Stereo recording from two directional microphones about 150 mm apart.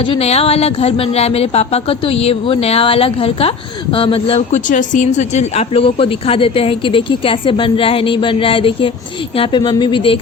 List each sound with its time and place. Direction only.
0.0 s speech: 40° left (ahead or behind)